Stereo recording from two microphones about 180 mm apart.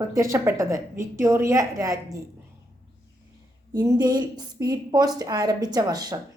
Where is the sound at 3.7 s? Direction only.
20° right (ahead or behind).